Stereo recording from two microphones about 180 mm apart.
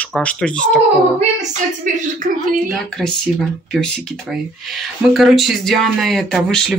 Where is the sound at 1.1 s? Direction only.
40° right (ahead or behind).